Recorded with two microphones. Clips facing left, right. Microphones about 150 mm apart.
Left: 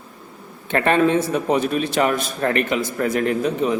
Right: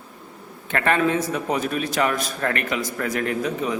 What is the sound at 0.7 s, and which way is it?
A man's voice, 25° left (ahead or behind).